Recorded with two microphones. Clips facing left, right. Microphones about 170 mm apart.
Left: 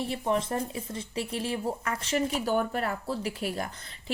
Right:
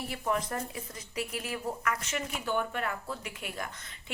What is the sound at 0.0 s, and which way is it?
Speech, 25° left (ahead or behind).